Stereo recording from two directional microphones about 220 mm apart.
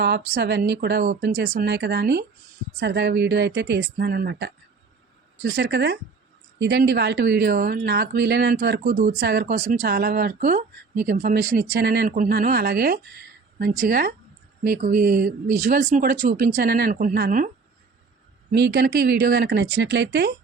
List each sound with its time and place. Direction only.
0.0 s speech: 50° right (ahead or behind)
18.5 s speech: 50° right (ahead or behind)